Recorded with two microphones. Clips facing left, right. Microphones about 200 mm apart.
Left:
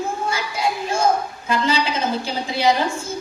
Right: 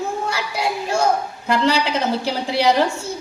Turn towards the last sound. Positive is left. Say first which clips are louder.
# right 2 dB
turn(degrees=-70)  # may be behind; listen again after turning